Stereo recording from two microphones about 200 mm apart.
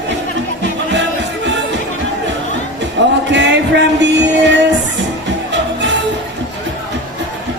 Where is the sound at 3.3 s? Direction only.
60° right (ahead or behind).